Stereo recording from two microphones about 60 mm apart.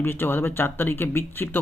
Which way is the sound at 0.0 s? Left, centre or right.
Left.